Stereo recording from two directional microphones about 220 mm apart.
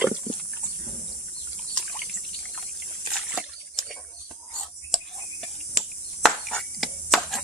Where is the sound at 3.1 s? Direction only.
Centre (ahead or behind).